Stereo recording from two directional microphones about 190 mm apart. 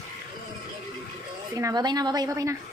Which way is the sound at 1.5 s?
20° right (ahead or behind).